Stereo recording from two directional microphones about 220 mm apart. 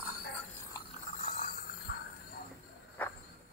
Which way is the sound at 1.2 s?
40° left (ahead or behind).